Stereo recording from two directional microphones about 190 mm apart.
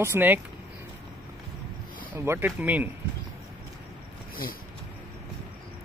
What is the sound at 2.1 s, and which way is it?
Speech, 10° right (ahead or behind).